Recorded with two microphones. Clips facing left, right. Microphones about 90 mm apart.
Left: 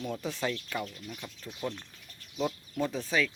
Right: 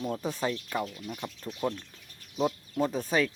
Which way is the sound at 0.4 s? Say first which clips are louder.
Right 2 dB; 20° right (ahead or behind).